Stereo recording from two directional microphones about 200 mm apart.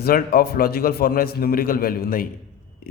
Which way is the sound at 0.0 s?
50° left (ahead or behind).